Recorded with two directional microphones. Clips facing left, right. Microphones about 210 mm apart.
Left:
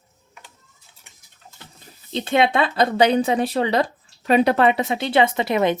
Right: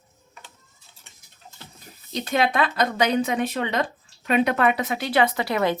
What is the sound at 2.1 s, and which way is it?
Speech, 25° left (ahead or behind).